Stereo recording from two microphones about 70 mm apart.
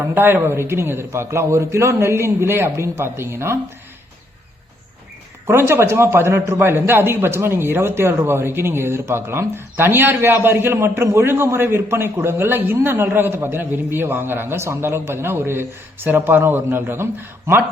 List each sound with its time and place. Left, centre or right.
0.1 s speech: right
5.5 s speech: right